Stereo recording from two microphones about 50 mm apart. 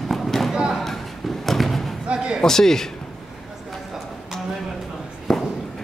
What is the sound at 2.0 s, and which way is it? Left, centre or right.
Speech, centre.